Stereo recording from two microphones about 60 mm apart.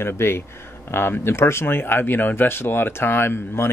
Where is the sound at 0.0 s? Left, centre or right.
Left.